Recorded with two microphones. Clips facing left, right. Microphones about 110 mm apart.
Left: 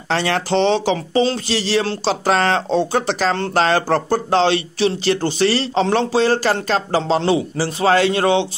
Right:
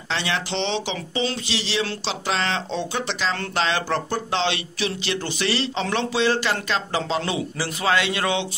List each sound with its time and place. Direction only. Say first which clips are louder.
0.1 s speech: left 8 dB; 45° left (ahead or behind)